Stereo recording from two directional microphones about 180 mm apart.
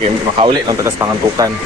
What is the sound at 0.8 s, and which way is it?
Speech, 15° right (ahead or behind).